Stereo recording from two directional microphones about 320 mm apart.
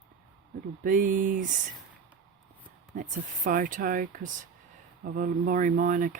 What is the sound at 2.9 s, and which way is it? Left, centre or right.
Speech, right.